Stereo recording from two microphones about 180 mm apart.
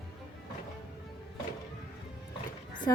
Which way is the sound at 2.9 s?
15° left (ahead or behind).